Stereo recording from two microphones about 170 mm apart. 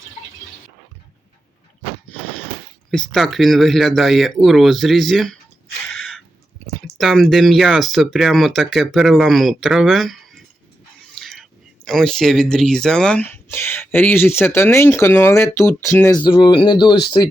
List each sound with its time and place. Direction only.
2.9 s speech: 5° left (ahead or behind)
5.9 s a sound: 5° left (ahead or behind)
6.8 s speech: centre (ahead or behind)
11.2 s whispering: centre (ahead or behind)
11.9 s speech: 5° left (ahead or behind)
16.2 s speech: 25° left (ahead or behind)